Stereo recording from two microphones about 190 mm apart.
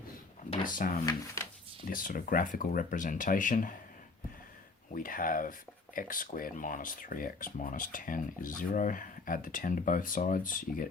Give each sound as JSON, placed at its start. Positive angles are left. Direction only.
{"t": 0.6, "sound": "speech", "side_deg": 45}
{"t": 4.9, "sound": "speech", "side_deg": 45}